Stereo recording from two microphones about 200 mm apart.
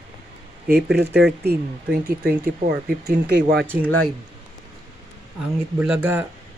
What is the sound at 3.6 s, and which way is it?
Speech, 5° left (ahead or behind).